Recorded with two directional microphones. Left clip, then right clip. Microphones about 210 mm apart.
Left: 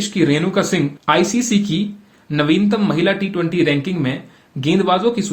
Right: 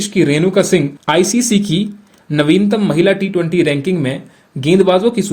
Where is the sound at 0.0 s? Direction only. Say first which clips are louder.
Right 4 dB; 40° right (ahead or behind).